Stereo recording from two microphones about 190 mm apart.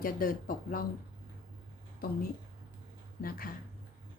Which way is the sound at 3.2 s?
50° left (ahead or behind).